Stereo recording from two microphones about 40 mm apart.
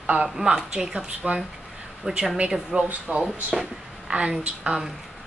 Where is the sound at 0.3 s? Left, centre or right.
Centre.